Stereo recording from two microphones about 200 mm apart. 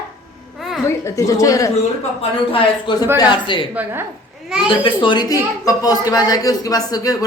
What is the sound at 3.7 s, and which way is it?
Speech, 10° right (ahead or behind).